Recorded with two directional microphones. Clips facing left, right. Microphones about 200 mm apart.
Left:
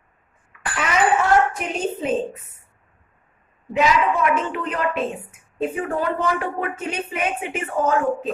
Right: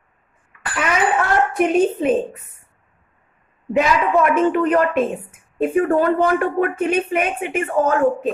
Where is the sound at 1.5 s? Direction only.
60° right (ahead or behind).